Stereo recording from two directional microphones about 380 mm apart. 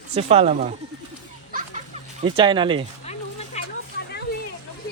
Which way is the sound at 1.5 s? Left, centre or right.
Centre.